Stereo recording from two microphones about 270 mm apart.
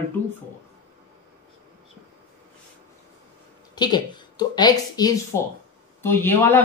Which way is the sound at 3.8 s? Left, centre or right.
Centre.